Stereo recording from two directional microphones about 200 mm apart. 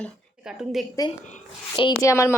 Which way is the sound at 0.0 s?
Centre (ahead or behind).